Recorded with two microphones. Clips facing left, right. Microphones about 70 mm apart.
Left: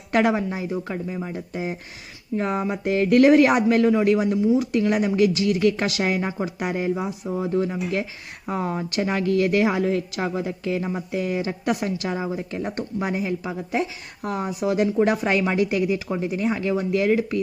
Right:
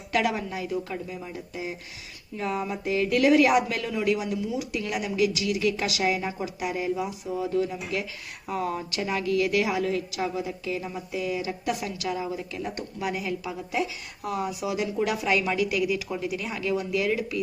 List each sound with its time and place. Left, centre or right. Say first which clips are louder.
0.1 s a woman's voice: left 5 dB; left